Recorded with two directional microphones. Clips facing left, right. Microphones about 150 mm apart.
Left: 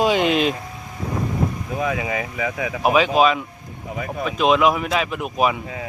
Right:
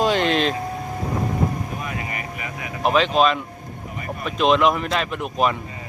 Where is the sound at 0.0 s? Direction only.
5° left (ahead or behind).